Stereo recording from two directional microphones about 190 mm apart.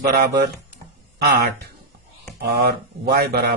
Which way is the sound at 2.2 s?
55° right (ahead or behind).